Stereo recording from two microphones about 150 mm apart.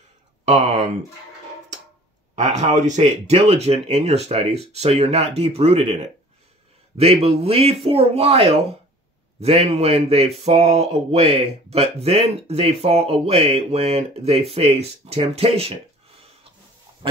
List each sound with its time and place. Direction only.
0.5 s speech: 45° right (ahead or behind)
2.3 s speech: 50° right (ahead or behind)
7.0 s speech: 40° right (ahead or behind)